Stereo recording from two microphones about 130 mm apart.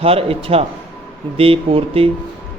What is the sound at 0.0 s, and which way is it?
Speech, 45° right (ahead or behind).